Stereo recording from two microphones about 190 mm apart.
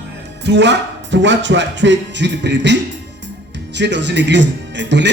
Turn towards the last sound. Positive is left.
turn(degrees=-65)  # may be behind; listen again after turning